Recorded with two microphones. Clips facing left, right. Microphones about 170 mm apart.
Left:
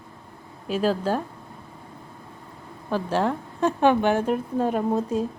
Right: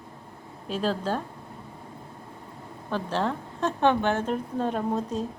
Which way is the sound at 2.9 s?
10° left (ahead or behind).